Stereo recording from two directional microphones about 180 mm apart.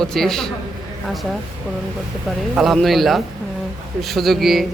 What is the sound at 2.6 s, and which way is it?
Speech, centre (ahead or behind).